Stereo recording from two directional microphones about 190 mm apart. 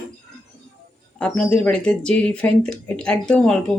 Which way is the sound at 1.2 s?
5° left (ahead or behind).